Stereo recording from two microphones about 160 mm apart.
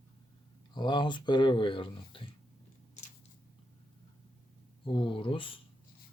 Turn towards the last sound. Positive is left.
turn(degrees=35)  # may be behind; listen again after turning